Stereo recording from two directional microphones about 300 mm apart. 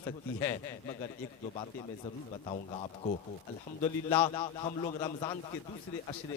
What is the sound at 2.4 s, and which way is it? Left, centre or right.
A man's voice, centre.